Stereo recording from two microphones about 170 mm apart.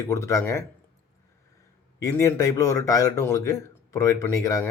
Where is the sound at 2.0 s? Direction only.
15° left (ahead or behind).